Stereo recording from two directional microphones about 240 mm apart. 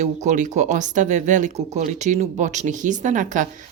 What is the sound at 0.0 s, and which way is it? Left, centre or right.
Speech, right.